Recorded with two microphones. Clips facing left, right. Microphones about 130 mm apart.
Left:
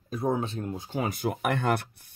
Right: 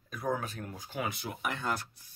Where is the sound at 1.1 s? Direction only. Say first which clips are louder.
Left 9 dB; 50° left (ahead or behind).